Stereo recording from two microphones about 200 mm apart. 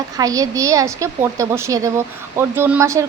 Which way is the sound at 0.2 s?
15° right (ahead or behind).